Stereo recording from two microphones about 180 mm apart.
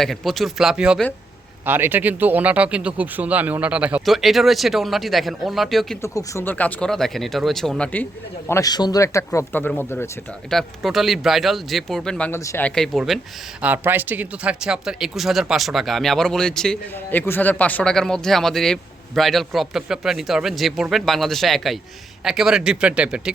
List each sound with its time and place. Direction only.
0.0 s speech: centre (ahead or behind)
6.0 s speech: 15° left (ahead or behind)
8.4 s speech: 20° left (ahead or behind)
10.5 s speech: centre (ahead or behind)